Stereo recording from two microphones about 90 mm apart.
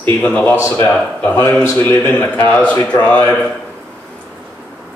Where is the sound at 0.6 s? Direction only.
30° left (ahead or behind).